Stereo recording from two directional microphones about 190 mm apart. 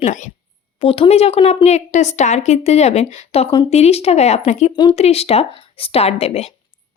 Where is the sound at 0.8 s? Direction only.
30° left (ahead or behind).